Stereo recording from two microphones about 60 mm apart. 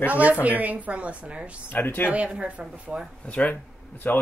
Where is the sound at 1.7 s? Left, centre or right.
Left.